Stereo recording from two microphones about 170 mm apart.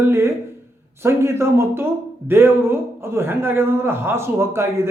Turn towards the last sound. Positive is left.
turn(degrees=-15)  # may be behind; listen again after turning